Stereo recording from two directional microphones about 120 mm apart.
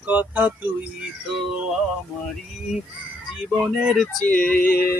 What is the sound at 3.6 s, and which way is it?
Speech, centre (ahead or behind).